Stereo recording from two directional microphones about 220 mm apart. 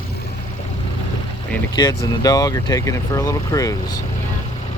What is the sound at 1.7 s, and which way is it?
Speech, 15° left (ahead or behind).